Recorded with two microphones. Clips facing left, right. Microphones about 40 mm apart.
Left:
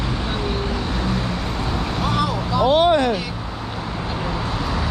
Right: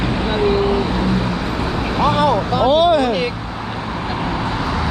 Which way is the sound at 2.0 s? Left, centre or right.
Right.